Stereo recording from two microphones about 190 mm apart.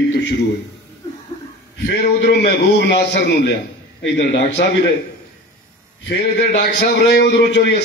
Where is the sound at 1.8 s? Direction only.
60° left (ahead or behind).